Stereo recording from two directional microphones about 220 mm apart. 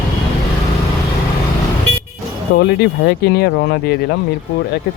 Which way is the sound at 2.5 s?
50° left (ahead or behind).